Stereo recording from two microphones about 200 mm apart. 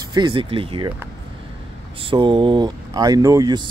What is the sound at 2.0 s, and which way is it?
Speech, 25° right (ahead or behind).